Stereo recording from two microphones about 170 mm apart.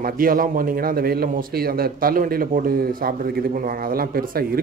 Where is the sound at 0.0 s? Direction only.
55° right (ahead or behind).